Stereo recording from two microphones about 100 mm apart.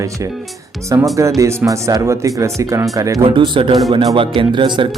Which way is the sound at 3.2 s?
55° right (ahead or behind).